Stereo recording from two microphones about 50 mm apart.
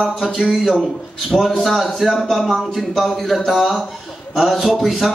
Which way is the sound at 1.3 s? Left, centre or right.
Centre.